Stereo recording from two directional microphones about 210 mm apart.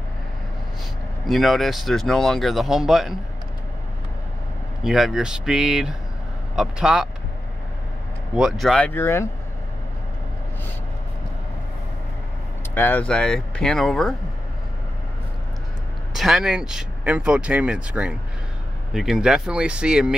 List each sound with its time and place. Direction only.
1.2 s speech: centre (ahead or behind)
4.8 s speech: centre (ahead or behind)
8.4 s speech: centre (ahead or behind)
12.7 s speech: 10° left (ahead or behind)
16.2 s speech: centre (ahead or behind)